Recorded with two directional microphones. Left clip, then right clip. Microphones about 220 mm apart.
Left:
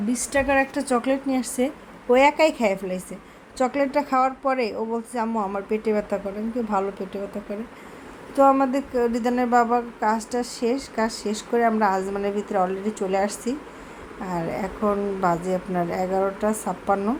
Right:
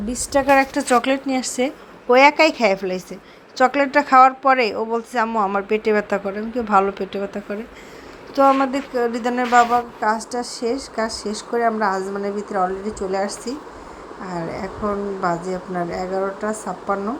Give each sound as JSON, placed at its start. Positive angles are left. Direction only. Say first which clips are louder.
{"t": 0.1, "sound": "a woman's voice", "louder": "right 6 dB", "side_deg": -10}
{"t": 4.7, "sound": "speech", "louder": "right 5 dB", "side_deg": -25}
{"t": 4.9, "sound": "a woman's voice", "louder": "right 8 dB", "side_deg": -5}
{"t": 8.4, "sound": "a woman's voice", "louder": "right 2 dB", "side_deg": -5}
{"t": 13.1, "sound": "speech", "louder": "left 1 dB", "side_deg": 10}
{"t": 14.8, "sound": "a woman's voice", "louder": "even", "side_deg": -5}